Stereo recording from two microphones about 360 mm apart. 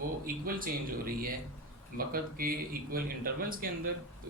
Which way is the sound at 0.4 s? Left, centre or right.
Right.